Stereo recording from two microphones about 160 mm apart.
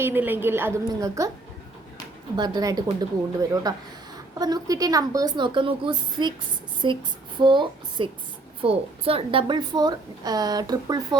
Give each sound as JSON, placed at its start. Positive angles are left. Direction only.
{"t": 0.0, "sound": "a woman's voice", "side_deg": -15}
{"t": 2.3, "sound": "a woman's voice", "side_deg": -25}